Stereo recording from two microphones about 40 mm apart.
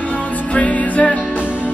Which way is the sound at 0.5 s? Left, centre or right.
Left.